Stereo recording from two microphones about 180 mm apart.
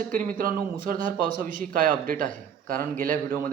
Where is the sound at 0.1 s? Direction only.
50° right (ahead or behind).